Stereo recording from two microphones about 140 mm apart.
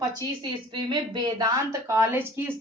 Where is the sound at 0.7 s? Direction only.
35° right (ahead or behind); by 2.5 s 15° right (ahead or behind).